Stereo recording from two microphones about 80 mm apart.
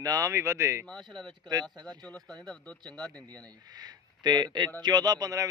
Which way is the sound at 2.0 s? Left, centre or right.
Centre.